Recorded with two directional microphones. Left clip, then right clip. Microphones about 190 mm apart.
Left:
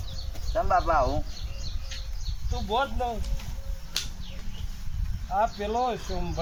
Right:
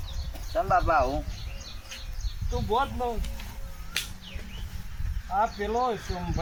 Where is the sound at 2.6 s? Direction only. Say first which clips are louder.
Even; 15° left (ahead or behind).